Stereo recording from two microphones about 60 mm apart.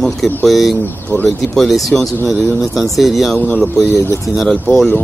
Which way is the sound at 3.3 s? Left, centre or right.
Left.